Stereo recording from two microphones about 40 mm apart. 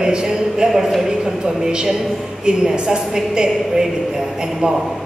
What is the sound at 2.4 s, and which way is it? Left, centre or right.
A man's voice, centre.